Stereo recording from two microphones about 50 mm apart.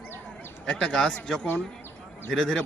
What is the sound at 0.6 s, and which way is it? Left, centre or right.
Speech, centre.